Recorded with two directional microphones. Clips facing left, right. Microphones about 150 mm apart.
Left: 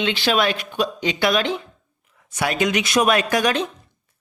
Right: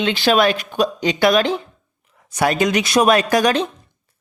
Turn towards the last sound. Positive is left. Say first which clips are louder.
# right 4 dB
turn(degrees=-35)  # may be behind; listen again after turning